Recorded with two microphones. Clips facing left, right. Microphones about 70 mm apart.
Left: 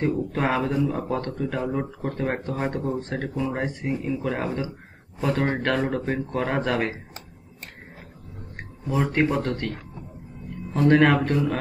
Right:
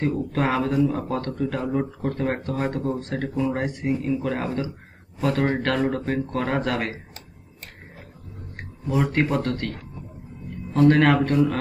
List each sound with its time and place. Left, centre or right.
0.0 s speech: centre
8.5 s a sound: centre
9.1 s speech: centre
10.7 s speech: centre
11.1 s speech: centre